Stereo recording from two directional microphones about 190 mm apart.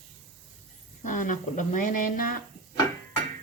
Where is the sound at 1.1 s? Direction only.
40° left (ahead or behind).